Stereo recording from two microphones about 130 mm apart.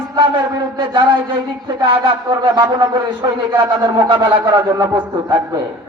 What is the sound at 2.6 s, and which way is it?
Wind instrument, 35° right (ahead or behind).